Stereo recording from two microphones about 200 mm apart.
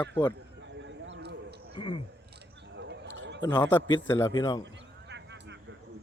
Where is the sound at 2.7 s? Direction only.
60° right (ahead or behind).